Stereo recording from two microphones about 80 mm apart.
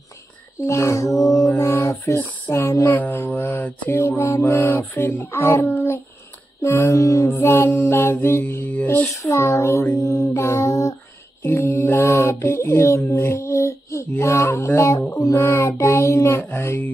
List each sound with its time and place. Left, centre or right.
0.7 s child singing: left
2.5 s speech: left
3.0 s mantra: left
6.6 s child singing: left
7.2 s music: left
9.1 s child singing: left
10.0 s music: left
11.4 s mantra: left
14.1 s child singing: left